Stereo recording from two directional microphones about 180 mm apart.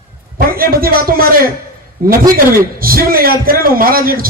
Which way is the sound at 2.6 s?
55° right (ahead or behind).